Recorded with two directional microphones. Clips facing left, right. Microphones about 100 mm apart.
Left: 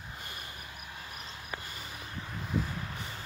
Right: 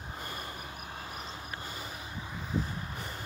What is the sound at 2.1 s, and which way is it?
Vehicle, 10° right (ahead or behind).